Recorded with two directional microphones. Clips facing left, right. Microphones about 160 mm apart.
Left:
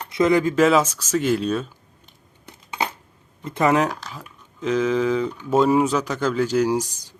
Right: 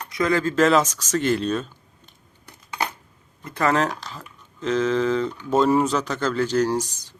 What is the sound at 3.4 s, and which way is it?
Speech, 20° left (ahead or behind).